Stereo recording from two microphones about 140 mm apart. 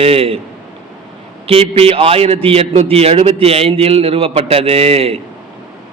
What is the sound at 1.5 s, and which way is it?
A man's voice, 45° right (ahead or behind).